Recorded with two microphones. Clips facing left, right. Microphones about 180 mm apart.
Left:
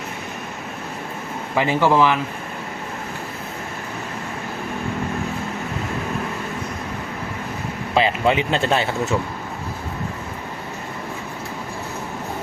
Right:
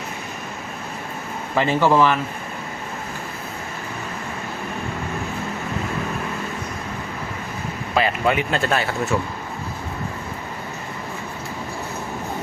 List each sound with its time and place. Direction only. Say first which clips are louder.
1.5 s a man's voice: even; 15° left (ahead or behind)
7.9 s speech: left 2 dB; 25° left (ahead or behind)